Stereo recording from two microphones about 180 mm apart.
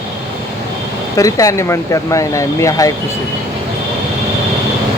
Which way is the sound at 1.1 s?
20° left (ahead or behind).